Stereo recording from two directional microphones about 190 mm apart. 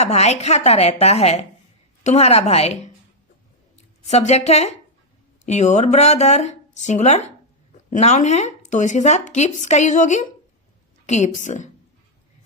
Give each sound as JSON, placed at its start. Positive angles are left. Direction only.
{"t": 0.0, "sound": "a woman's voice", "side_deg": 35}